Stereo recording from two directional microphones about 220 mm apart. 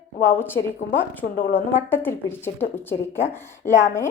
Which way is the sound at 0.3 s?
10° left (ahead or behind).